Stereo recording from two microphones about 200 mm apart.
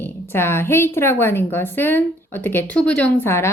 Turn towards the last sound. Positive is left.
turn(degrees=10)  # may be behind; listen again after turning